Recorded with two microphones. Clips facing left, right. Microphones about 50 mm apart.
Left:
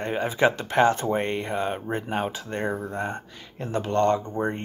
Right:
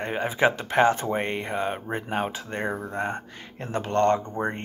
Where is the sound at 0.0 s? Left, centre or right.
Right.